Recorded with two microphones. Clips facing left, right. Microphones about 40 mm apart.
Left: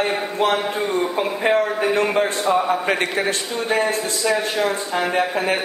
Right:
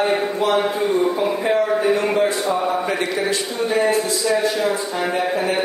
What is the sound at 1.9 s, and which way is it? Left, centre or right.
Speech, left.